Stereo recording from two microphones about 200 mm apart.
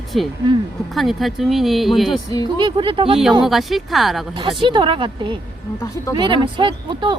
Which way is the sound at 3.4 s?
Centre (ahead or behind).